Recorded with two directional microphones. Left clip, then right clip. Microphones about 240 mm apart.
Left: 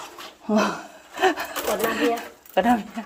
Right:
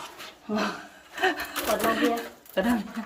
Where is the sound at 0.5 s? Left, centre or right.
Left.